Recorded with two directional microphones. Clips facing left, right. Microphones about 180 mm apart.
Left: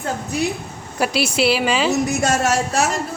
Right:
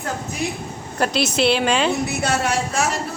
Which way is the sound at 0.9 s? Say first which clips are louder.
Left 1 dB; 10° left (ahead or behind).